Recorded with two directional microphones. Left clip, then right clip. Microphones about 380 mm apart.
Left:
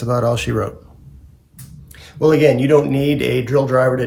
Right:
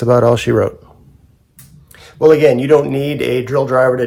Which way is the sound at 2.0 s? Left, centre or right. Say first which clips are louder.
Right 4 dB; centre.